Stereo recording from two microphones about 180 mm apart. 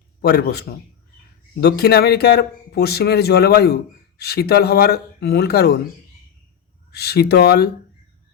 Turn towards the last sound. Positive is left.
turn(degrees=65)  # may be behind; listen again after turning